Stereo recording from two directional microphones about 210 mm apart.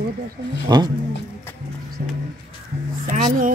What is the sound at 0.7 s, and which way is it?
Speech, 20° right (ahead or behind).